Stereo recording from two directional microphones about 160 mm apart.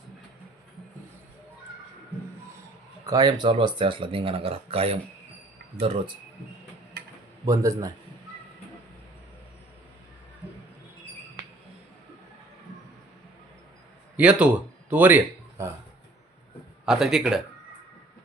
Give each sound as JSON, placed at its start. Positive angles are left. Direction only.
{"t": 3.1, "sound": "speech", "side_deg": -25}
{"t": 7.4, "sound": "speech", "side_deg": -20}
{"t": 14.2, "sound": "speech", "side_deg": -10}
{"t": 16.8, "sound": "speech", "side_deg": -5}